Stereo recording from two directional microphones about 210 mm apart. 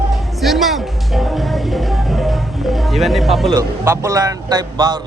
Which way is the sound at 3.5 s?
15° right (ahead or behind).